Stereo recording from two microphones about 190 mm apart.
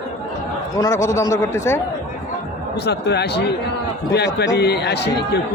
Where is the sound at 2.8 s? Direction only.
60° left (ahead or behind).